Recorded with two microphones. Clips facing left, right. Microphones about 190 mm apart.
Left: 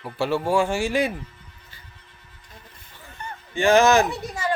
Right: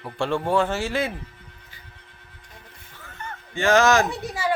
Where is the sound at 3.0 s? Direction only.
15° left (ahead or behind).